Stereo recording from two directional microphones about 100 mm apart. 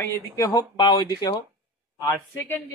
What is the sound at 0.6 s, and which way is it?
Speech, 45° left (ahead or behind).